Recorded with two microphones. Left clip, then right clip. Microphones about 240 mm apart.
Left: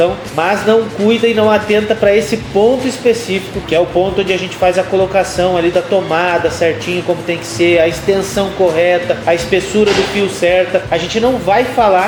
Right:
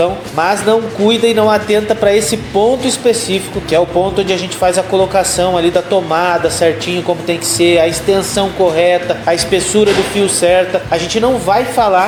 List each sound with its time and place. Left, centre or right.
0.0 s speech: right